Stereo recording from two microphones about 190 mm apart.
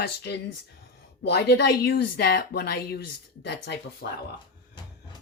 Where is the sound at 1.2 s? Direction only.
60° left (ahead or behind).